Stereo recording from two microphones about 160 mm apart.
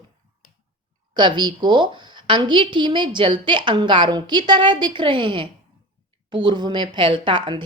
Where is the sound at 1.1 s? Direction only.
30° right (ahead or behind).